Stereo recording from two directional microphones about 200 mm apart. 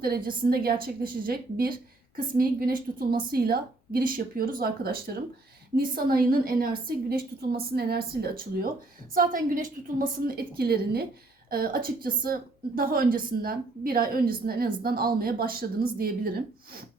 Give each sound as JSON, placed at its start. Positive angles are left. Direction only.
{"t": 0.0, "sound": "a woman's voice", "side_deg": -45}